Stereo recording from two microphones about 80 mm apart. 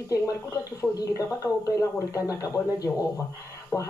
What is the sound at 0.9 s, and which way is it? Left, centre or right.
Speech, left.